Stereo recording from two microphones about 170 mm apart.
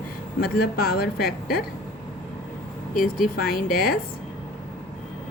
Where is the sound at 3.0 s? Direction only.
55° left (ahead or behind).